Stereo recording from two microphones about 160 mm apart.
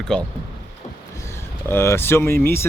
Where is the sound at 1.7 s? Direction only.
15° left (ahead or behind).